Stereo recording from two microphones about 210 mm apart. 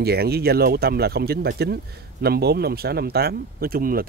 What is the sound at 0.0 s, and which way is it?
Speech, 50° right (ahead or behind).